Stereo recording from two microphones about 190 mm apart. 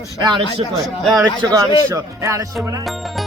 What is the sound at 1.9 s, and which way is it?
Speech, 15° right (ahead or behind).